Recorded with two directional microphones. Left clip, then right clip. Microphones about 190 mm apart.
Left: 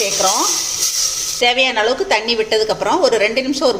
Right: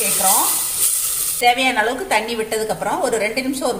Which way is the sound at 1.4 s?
35° left (ahead or behind).